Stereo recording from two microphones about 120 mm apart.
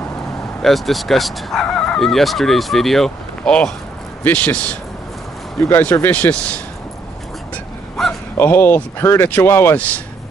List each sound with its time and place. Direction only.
0.6 s speech: centre (ahead or behind)
5.6 s speech: 20° left (ahead or behind)
7.5 s a sound: 5° left (ahead or behind)
8.4 s speech: 15° left (ahead or behind)